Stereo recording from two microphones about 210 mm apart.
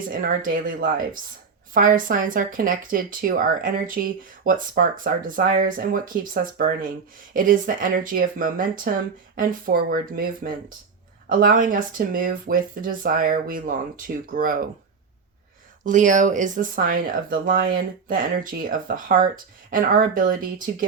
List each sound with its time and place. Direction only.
0.1 s speech: 40° right (ahead or behind)
15.8 s speech: 35° right (ahead or behind)